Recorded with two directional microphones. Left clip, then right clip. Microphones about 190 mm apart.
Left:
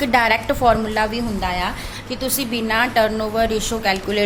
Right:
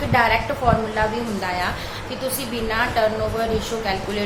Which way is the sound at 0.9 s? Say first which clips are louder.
Left 1 dB; 45° left (ahead or behind).